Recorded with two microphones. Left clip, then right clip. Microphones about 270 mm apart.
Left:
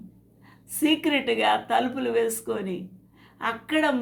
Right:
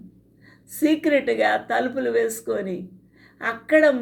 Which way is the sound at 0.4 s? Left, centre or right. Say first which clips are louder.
Right 2 dB; centre.